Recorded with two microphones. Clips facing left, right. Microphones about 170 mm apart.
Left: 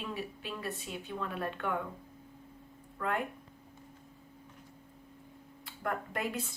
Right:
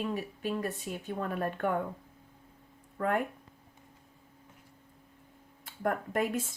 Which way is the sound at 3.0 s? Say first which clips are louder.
Right 4 dB; 50° right (ahead or behind).